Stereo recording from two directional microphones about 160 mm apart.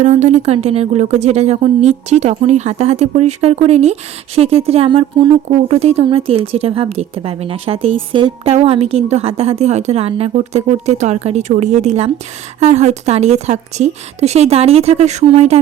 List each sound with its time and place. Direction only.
0.0 s speech: 45° right (ahead or behind)